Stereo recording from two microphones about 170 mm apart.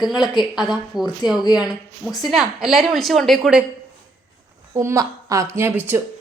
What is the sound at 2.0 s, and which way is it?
A woman's voice, centre (ahead or behind).